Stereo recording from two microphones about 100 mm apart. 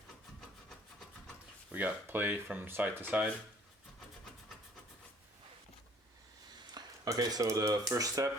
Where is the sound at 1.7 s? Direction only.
20° right (ahead or behind).